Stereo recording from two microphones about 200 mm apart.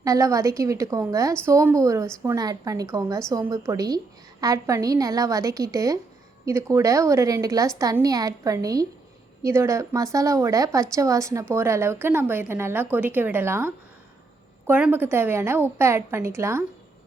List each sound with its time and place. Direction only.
0.0 s a woman's voice: 15° right (ahead or behind)